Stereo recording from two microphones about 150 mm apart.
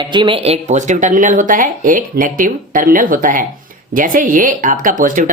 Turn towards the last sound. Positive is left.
turn(degrees=-65)  # may be behind; listen again after turning